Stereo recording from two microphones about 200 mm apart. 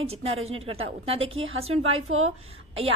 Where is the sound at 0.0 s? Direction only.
30° right (ahead or behind).